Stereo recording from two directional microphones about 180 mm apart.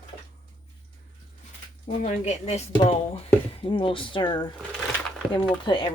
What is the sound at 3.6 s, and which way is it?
Speech, 30° left (ahead or behind).